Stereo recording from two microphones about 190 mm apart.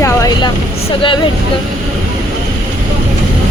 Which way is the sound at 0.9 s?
25° left (ahead or behind).